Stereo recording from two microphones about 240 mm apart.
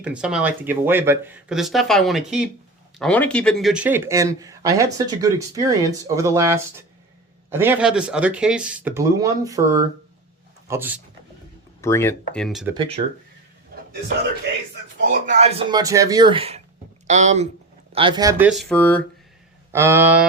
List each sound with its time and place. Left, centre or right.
0.0 s speech: centre
11.8 s speech: centre
15.0 s speech: right; by 19.0 s centre
19.7 s speech: centre